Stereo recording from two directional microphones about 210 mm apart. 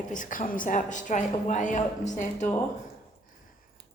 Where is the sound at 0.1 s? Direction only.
40° left (ahead or behind).